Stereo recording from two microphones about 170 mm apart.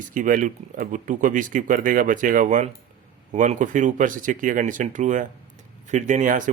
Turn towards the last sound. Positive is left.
turn(degrees=-50)  # may be behind; listen again after turning